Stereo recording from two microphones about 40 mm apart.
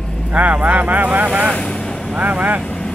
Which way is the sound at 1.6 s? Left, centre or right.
Left.